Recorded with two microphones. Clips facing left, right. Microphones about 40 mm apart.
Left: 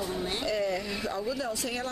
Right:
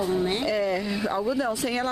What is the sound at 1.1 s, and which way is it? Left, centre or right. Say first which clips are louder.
Speech: right 8 dB; right.